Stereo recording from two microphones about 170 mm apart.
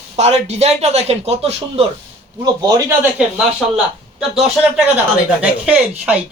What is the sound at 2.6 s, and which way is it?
Speech, 20° right (ahead or behind).